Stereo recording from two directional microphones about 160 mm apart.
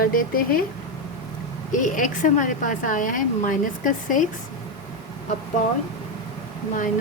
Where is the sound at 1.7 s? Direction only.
55° left (ahead or behind).